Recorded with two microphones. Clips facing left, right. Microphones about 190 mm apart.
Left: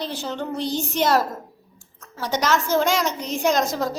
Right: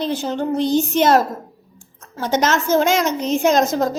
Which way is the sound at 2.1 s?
50° right (ahead or behind).